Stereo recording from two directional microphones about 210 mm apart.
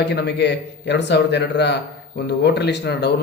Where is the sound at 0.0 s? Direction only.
55° left (ahead or behind).